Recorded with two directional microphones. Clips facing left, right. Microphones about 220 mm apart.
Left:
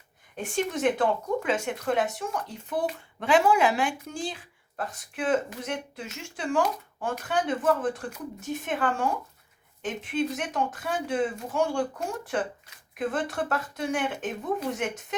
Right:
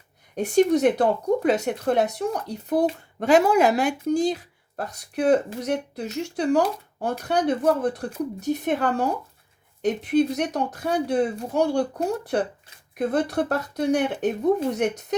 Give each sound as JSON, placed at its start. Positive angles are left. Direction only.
{"t": 0.3, "sound": "speech", "side_deg": -40}